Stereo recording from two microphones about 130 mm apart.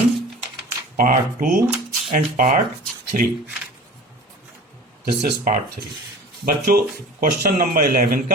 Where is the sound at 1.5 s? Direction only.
10° right (ahead or behind).